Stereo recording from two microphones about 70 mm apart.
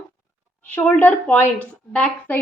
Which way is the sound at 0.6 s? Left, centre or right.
Left.